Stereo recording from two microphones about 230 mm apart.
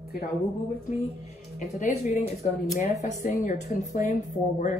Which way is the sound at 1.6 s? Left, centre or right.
Left.